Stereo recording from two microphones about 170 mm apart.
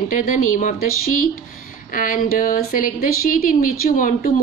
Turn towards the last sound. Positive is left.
turn(degrees=55)  # may be behind; listen again after turning